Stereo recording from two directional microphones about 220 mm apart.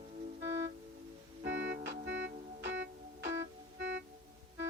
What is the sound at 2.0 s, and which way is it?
Music, 55° right (ahead or behind).